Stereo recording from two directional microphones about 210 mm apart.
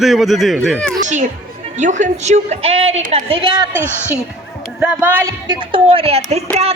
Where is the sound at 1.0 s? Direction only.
35° right (ahead or behind).